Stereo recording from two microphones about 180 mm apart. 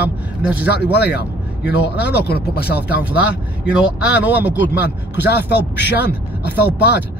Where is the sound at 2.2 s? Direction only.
60° left (ahead or behind).